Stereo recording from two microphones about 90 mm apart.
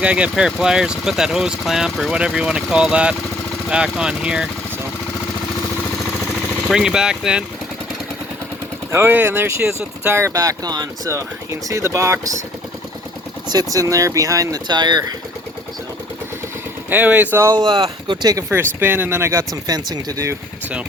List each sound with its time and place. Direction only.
0.0 s speech: 10° right (ahead or behind)
6.7 s speech: 5° right (ahead or behind)
8.9 s speech: 25° right (ahead or behind); by 11.1 s 45° right (ahead or behind)
11.7 s speech: 35° right (ahead or behind)
13.5 s speech: 40° right (ahead or behind)
14.7 s speech: 55° right (ahead or behind)
16.9 s speech: 20° right (ahead or behind)
17.5 s speech: 55° right (ahead or behind)
18.4 s speech: 25° right (ahead or behind)
19.6 s speech: 45° right (ahead or behind)